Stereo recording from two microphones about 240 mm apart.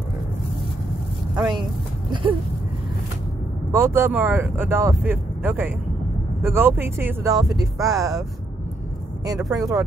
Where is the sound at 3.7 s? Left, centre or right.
Centre.